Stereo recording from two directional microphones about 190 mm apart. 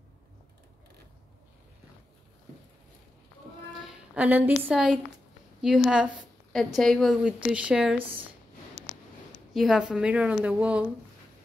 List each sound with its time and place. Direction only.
4.1 s a woman's voice: 10° right (ahead or behind)
9.5 s a woman's voice: centre (ahead or behind)